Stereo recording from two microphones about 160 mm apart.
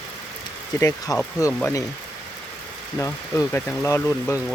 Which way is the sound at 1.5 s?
10° left (ahead or behind).